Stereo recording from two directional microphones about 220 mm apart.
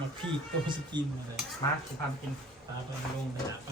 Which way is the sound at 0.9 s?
20° right (ahead or behind).